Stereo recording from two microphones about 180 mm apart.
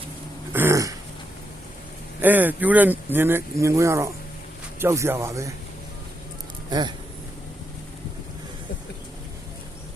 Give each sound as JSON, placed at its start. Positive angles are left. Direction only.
{"t": 0.5, "sound": "a sound", "side_deg": -15}
{"t": 2.2, "sound": "speech", "side_deg": -10}
{"t": 6.7, "sound": "speech", "side_deg": -25}